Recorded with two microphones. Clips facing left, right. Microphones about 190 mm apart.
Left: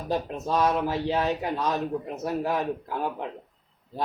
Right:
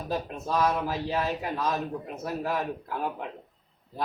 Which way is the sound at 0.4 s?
20° left (ahead or behind).